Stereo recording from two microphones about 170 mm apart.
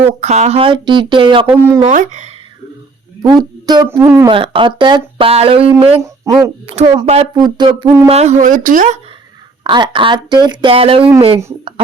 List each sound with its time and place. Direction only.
0.0 s speech: 40° right (ahead or behind)
1.5 s speech: 15° right (ahead or behind)
1.9 s speech: 45° right (ahead or behind)
3.2 s speech: 25° right (ahead or behind)
3.8 s speech: 15° right (ahead or behind)
4.3 s speech: 30° right (ahead or behind)
6.0 s speech: 20° right (ahead or behind)
6.7 s speech: 40° right (ahead or behind)
7.3 s speech: 25° right (ahead or behind); by 9.0 s 50° right (ahead or behind)
9.6 s speech: 25° right (ahead or behind)